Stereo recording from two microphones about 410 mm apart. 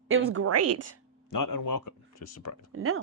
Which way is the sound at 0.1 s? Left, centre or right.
Right.